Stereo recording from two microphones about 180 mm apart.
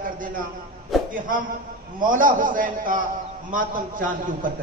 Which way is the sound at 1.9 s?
50° right (ahead or behind).